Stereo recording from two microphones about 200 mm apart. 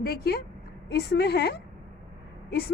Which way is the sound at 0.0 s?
50° left (ahead or behind).